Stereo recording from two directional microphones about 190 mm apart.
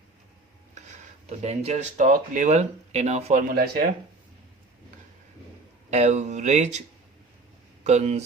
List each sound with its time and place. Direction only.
0.7 s speech: 40° right (ahead or behind)
3.5 s speech: 50° right (ahead or behind)
5.9 s speech: 40° right (ahead or behind)
7.9 s speech: 35° right (ahead or behind)